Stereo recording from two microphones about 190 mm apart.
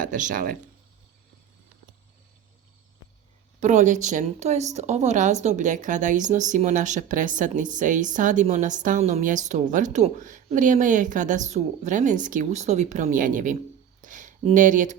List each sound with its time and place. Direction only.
0.0 s speech: 45° right (ahead or behind)
3.6 s speech: 40° right (ahead or behind)
14.0 s a sound: 40° right (ahead or behind)
14.5 s speech: 40° right (ahead or behind)